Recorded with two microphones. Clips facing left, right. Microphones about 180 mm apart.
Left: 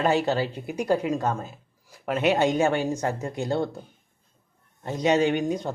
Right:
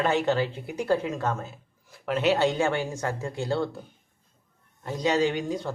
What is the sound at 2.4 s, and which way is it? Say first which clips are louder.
Speech: left 2 dB; 20° left (ahead or behind).